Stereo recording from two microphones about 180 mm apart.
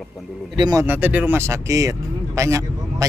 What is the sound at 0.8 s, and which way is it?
Speech, 10° right (ahead or behind).